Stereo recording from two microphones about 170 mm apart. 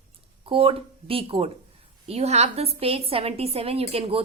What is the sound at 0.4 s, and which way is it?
Speech, 30° right (ahead or behind).